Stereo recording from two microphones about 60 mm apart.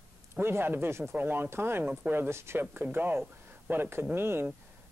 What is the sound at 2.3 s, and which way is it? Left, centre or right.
Speech, right.